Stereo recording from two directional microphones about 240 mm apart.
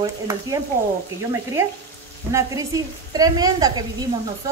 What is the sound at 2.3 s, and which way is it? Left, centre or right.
A woman's voice, centre.